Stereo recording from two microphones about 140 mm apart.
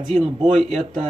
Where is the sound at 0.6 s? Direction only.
50° right (ahead or behind).